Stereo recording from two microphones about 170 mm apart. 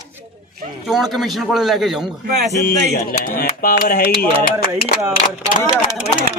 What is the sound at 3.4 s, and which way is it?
Speech, 55° left (ahead or behind).